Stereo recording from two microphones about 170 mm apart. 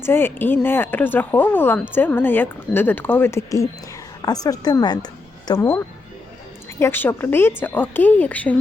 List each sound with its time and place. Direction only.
0.0 s speech: 15° left (ahead or behind)